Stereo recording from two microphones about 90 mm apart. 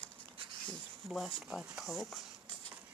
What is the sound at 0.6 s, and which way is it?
Speech, centre (ahead or behind).